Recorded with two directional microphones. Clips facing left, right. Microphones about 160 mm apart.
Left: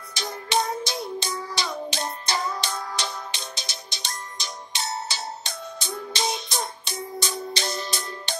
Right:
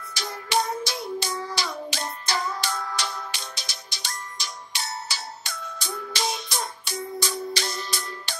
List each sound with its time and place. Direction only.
0.1 s music: 20° left (ahead or behind)